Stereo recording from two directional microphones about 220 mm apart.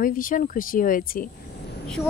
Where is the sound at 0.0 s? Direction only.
40° left (ahead or behind).